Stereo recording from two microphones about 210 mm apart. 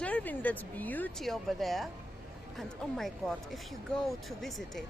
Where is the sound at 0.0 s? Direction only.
5° left (ahead or behind).